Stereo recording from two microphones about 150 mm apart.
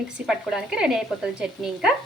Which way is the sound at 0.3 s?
5° right (ahead or behind).